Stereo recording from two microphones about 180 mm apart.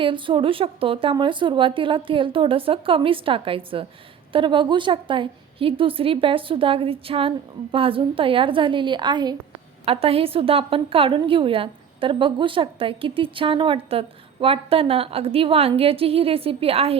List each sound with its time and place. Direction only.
0.0 s a woman's voice: 30° right (ahead or behind)